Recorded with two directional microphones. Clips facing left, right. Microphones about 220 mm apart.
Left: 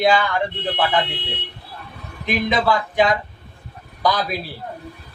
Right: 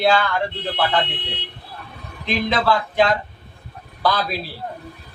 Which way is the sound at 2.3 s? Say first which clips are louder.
Even; 15° left (ahead or behind).